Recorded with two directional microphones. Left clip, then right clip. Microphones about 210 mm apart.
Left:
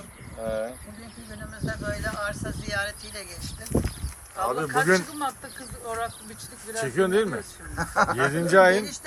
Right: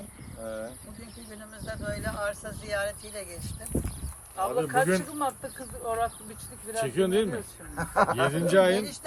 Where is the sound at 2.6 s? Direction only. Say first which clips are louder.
Left 1 dB; 45° right (ahead or behind).